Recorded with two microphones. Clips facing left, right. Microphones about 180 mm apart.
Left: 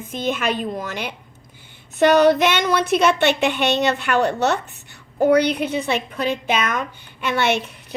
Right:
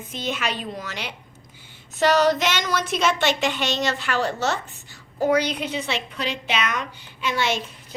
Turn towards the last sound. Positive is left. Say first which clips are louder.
# left 5 dB
turn(degrees=65)  # may be behind; listen again after turning